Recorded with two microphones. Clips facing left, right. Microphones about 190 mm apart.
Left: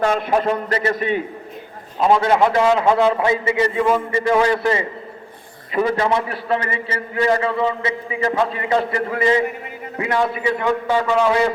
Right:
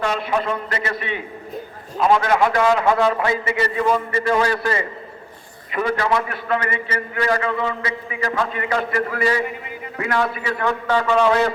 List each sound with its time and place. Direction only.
0.0 s a man's voice: 50° left (ahead or behind)
0.3 s a man's voice: 35° left (ahead or behind)
2.0 s a man's voice: 25° left (ahead or behind); by 11.3 s 10° left (ahead or behind)